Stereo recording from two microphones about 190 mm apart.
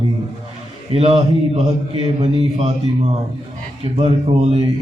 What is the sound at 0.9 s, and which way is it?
A man's voice, 35° right (ahead or behind).